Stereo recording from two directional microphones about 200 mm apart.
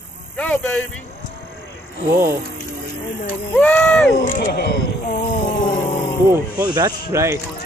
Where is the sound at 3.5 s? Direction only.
10° left (ahead or behind).